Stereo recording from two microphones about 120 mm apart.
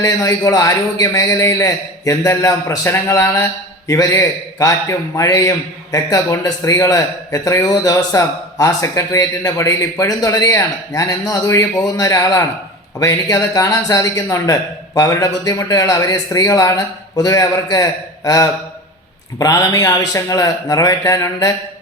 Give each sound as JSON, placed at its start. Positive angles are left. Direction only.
{"t": 0.0, "sound": "a man's voice", "side_deg": 25}
{"t": 19.4, "sound": "a man's voice", "side_deg": 30}